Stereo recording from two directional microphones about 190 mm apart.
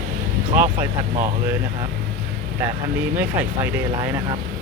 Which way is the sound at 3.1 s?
10° right (ahead or behind).